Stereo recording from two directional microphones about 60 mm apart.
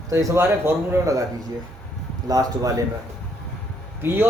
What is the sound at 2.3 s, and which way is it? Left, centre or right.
Speech, right.